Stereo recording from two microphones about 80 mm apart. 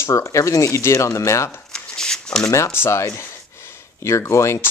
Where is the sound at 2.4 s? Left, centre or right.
Left.